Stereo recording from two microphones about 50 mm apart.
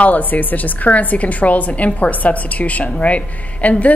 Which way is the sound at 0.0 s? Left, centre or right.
Left.